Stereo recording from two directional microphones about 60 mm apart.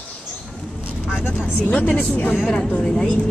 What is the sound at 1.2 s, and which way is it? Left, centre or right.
Vehicle, left.